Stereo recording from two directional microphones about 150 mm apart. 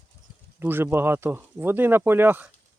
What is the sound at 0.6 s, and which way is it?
Speech, 15° right (ahead or behind).